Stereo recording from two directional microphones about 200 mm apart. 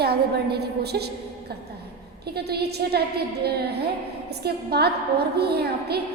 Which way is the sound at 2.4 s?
55° right (ahead or behind).